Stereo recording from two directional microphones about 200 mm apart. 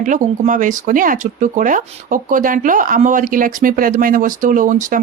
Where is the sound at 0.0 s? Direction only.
40° right (ahead or behind).